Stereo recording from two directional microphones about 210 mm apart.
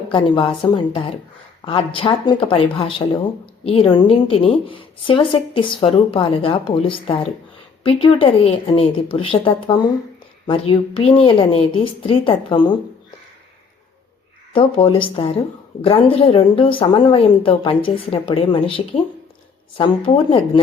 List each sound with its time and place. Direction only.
0.1 s a woman's voice: 25° left (ahead or behind)
14.5 s a woman's voice: 25° left (ahead or behind)